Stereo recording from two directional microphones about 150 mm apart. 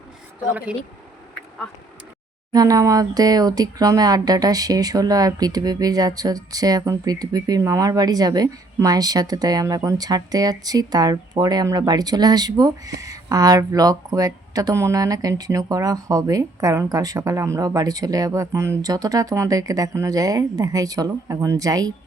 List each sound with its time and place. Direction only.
0.5 s speech: 10° right (ahead or behind)
2.5 s speech: 25° right (ahead or behind)